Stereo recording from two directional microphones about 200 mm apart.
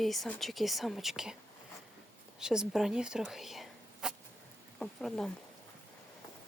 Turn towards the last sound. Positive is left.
turn(degrees=0)  # may be behind; listen again after turning